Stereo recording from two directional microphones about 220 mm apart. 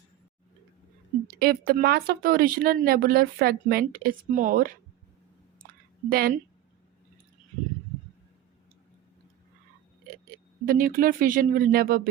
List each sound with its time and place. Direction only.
1.4 s speech: 45° right (ahead or behind)
6.1 s speech: 40° right (ahead or behind)
10.7 s speech: 40° right (ahead or behind)